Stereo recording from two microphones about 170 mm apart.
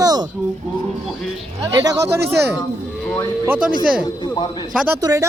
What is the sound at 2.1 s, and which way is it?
Speech, 75° right (ahead or behind).